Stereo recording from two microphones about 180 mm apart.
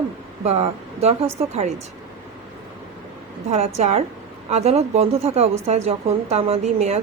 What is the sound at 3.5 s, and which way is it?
A woman's voice, 35° right (ahead or behind).